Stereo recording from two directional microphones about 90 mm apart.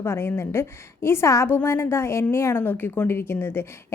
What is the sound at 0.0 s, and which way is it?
Speech, 25° left (ahead or behind).